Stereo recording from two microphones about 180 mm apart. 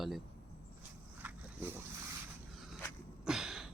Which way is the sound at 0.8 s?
10° right (ahead or behind).